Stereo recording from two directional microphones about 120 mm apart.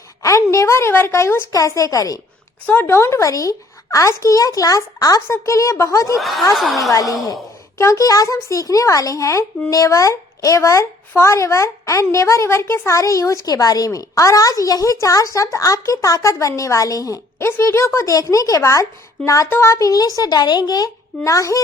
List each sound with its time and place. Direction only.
0.2 s a woman's voice: 25° left (ahead or behind)
2.6 s speech: 20° left (ahead or behind)
6.1 s a woman's voice: centre (ahead or behind)
6.9 s speech: 30° left (ahead or behind)